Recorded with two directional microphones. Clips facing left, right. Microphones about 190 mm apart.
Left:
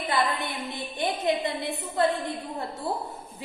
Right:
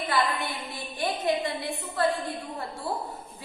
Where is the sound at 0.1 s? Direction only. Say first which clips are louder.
Left 1 dB; 20° left (ahead or behind).